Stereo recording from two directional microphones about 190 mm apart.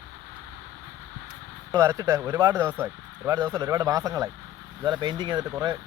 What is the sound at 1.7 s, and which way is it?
A man's voice, 20° right (ahead or behind).